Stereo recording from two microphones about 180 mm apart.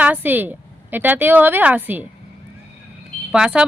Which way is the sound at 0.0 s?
10° right (ahead or behind).